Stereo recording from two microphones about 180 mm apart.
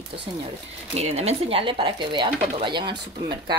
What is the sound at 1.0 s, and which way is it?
Speech, 35° right (ahead or behind).